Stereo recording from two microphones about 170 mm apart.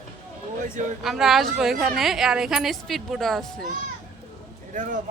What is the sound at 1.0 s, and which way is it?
A woman's voice, centre (ahead or behind).